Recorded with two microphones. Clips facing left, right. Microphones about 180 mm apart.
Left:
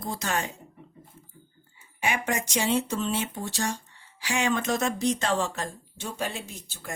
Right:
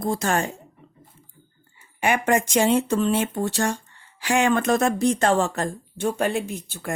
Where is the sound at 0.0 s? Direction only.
50° right (ahead or behind).